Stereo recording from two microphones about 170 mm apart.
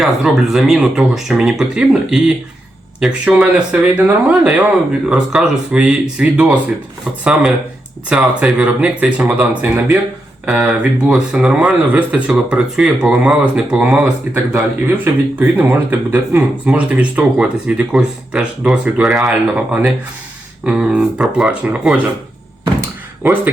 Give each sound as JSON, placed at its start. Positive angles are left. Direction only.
{"t": 0.0, "sound": "speech", "side_deg": 0}
{"t": 8.1, "sound": "speech", "side_deg": -5}